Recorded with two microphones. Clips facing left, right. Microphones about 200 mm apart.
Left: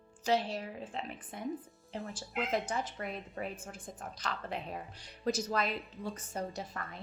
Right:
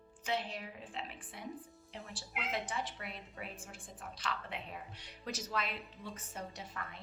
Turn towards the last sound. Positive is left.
turn(degrees=40)  # may be behind; listen again after turning